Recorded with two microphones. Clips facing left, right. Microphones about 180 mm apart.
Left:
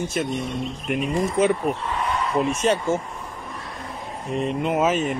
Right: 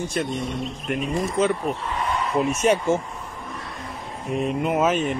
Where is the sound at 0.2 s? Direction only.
10° left (ahead or behind).